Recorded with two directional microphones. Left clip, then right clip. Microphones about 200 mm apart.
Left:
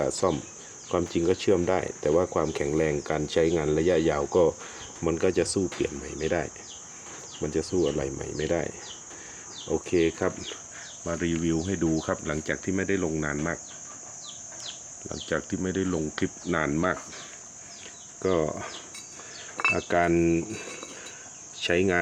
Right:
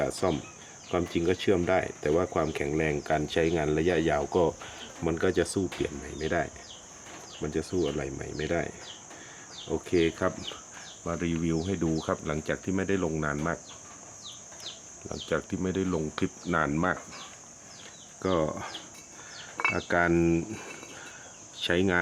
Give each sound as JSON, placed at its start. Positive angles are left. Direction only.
{"t": 0.0, "sound": "speech", "side_deg": 0}
{"t": 9.8, "sound": "speech", "side_deg": 5}
{"t": 15.1, "sound": "speech", "side_deg": 5}
{"t": 18.2, "sound": "speech", "side_deg": 0}
{"t": 19.7, "sound": "speech", "side_deg": 0}